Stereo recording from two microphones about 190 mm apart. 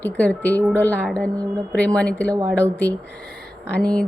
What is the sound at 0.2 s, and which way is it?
Speech, 5° left (ahead or behind).